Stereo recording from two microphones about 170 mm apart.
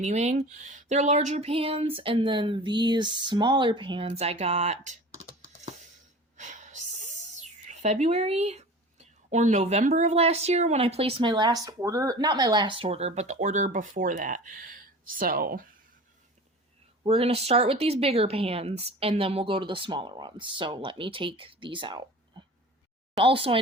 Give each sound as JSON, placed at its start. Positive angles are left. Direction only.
{"t": 0.0, "sound": "speech", "side_deg": -40}
{"t": 5.6, "sound": "a sound", "side_deg": -45}
{"t": 6.3, "sound": "speech", "side_deg": -45}
{"t": 17.0, "sound": "speech", "side_deg": -35}
{"t": 23.1, "sound": "speech", "side_deg": -35}